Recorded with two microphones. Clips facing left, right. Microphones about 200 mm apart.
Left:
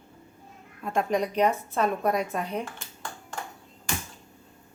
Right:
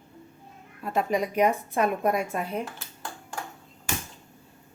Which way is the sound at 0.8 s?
5° right (ahead or behind).